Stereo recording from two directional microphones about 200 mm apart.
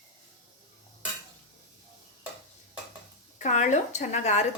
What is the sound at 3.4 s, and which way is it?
Speech, 40° left (ahead or behind).